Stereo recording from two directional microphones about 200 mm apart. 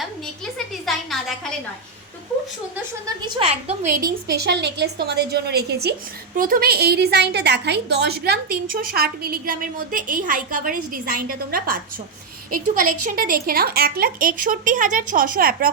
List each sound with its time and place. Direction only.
0.9 s a sound: centre (ahead or behind)
3.2 s a woman's voice: 25° right (ahead or behind)
4.3 s a woman's voice: 55° right (ahead or behind)